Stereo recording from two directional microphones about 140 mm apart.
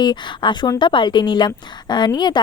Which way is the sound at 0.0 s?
30° left (ahead or behind).